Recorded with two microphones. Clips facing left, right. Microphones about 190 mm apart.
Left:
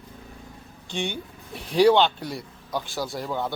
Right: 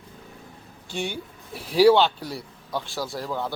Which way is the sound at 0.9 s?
5° right (ahead or behind).